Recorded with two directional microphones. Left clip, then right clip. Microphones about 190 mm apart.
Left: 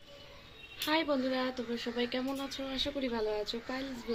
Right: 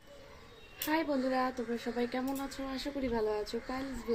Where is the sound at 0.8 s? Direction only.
5° right (ahead or behind).